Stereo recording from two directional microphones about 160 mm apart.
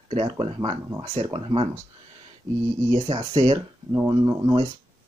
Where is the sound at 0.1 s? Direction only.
40° right (ahead or behind).